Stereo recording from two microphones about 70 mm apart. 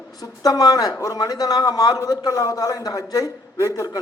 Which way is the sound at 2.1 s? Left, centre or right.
Left.